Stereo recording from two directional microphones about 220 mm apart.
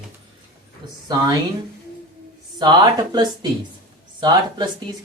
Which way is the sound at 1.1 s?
15° right (ahead or behind).